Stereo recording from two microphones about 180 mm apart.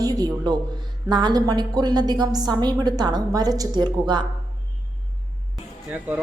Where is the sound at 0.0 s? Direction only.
20° right (ahead or behind).